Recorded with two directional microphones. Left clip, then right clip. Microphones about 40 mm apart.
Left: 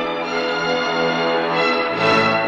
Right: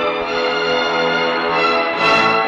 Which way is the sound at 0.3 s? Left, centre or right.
Left.